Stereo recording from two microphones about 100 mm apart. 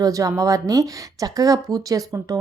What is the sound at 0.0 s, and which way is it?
Speech, 35° right (ahead or behind).